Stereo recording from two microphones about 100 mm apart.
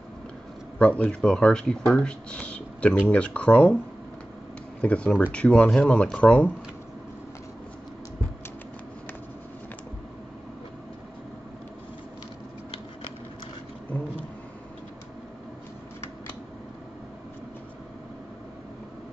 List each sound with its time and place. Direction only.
0.7 s speech: 15° left (ahead or behind)
4.8 s speech: 15° left (ahead or behind)